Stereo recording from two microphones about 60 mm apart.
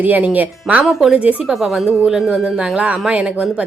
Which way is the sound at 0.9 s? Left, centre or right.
Centre.